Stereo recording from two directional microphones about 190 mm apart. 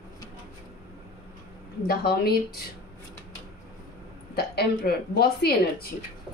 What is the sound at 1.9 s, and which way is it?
Speech, 55° left (ahead or behind).